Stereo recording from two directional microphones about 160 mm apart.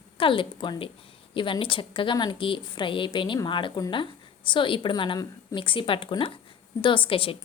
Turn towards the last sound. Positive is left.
turn(degrees=35)  # may be behind; listen again after turning